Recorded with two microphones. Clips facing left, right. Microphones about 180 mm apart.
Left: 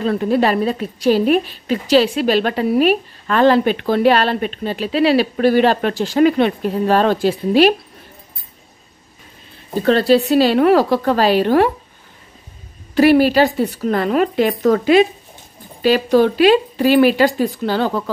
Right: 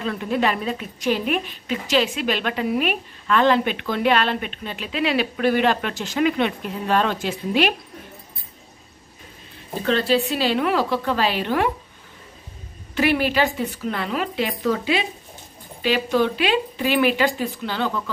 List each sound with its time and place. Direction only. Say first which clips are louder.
0.0 s a woman's voice: left 7 dB; 40° left (ahead or behind)
9.8 s a woman's voice: left 7 dB; 40° left (ahead or behind)
12.9 s a woman's voice: left 9 dB; 40° left (ahead or behind)